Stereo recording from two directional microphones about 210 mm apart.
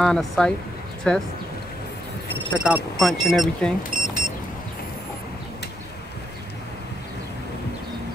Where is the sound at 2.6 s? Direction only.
Centre (ahead or behind).